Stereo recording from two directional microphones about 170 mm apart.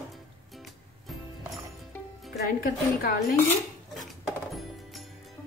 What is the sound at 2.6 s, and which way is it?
Speech, 60° left (ahead or behind).